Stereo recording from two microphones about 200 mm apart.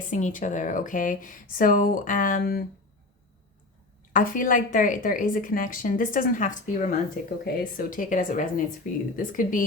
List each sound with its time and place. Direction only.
0.1 s speech: 40° left (ahead or behind)
4.1 s a woman's voice: 45° left (ahead or behind)